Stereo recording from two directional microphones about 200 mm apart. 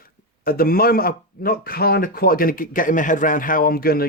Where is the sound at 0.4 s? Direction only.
50° left (ahead or behind).